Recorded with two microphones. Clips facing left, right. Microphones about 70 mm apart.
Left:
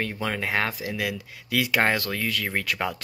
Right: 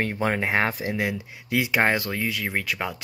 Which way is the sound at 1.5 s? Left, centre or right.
Centre.